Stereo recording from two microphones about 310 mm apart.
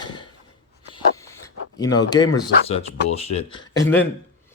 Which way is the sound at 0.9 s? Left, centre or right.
Centre.